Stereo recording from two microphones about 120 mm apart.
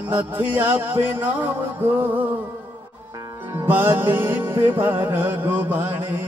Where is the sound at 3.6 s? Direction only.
15° right (ahead or behind).